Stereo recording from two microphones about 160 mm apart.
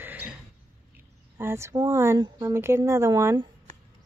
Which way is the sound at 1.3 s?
15° right (ahead or behind).